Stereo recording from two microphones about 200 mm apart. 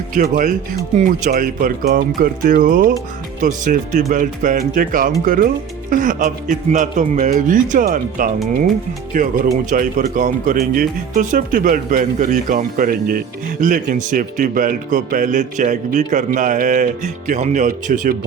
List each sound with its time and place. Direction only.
0.1 s speech: 40° right (ahead or behind)